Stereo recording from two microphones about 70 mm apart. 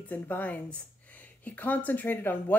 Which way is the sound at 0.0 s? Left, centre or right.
Left.